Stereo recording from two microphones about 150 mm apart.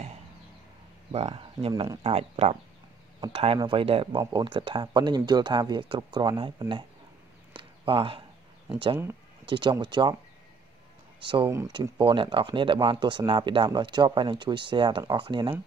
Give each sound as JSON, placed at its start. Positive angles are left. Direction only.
{"t": 1.1, "sound": "speech", "side_deg": -40}
{"t": 3.5, "sound": "speech", "side_deg": -35}
{"t": 7.5, "sound": "a sound", "side_deg": -35}
{"t": 8.6, "sound": "speech", "side_deg": -35}
{"t": 11.1, "sound": "speech", "side_deg": -35}